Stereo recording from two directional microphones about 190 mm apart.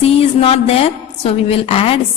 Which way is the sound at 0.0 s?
30° left (ahead or behind).